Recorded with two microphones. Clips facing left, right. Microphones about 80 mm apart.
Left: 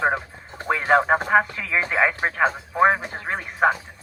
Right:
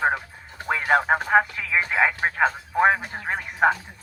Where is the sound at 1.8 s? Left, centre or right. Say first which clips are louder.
Left 1 dB; left.